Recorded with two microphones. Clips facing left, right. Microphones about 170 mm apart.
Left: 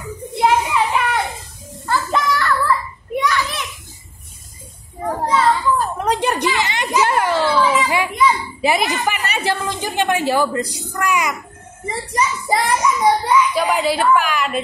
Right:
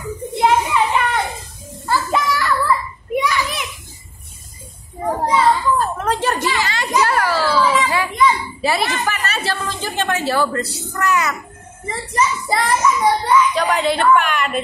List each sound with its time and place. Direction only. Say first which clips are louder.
0.4 s children playing: even; centre (ahead or behind)
1.9 s children playing: even; 10° right (ahead or behind)
3.2 s a sound: even; 15° right (ahead or behind)
5.0 s children playing: right 1 dB; 10° right (ahead or behind)
5.8 s a sound: even; 15° left (ahead or behind)
7.0 s children playing: left 1 dB; 20° left (ahead or behind)
12.1 s a child's voice: even; 15° left (ahead or behind)